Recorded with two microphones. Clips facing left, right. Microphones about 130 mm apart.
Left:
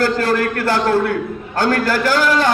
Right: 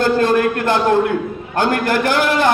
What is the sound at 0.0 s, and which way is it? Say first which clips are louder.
A man's voice: right 2 dB; 20° right (ahead or behind).